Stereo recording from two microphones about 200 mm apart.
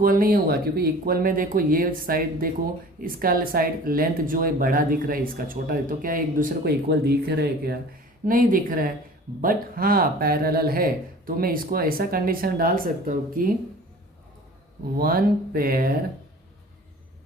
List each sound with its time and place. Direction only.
0.0 s speech: 45° right (ahead or behind)
14.9 s speech: 45° right (ahead or behind)